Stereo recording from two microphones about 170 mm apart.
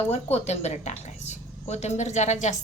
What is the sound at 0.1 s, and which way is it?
A woman's voice, 40° left (ahead or behind).